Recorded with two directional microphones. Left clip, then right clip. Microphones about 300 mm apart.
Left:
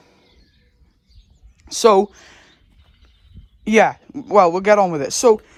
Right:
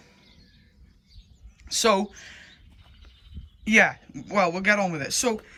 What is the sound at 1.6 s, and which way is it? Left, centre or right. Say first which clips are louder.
Speech: left 9 dB; centre.